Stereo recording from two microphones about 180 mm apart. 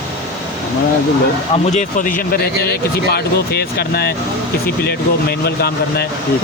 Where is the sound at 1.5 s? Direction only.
40° left (ahead or behind); by 6.1 s 60° left (ahead or behind).